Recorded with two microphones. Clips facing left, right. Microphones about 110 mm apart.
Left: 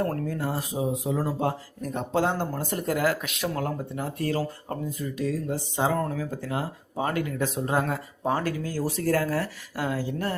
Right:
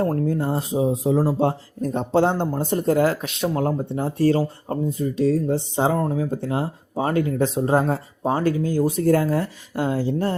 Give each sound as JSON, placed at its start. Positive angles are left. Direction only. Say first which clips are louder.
{"t": 0.0, "sound": "speech", "louder": "right 6 dB", "side_deg": -25}